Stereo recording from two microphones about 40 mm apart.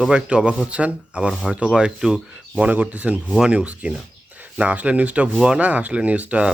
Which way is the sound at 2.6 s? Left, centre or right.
Right.